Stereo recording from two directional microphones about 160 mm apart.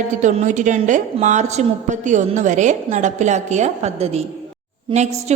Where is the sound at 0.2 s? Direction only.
50° right (ahead or behind).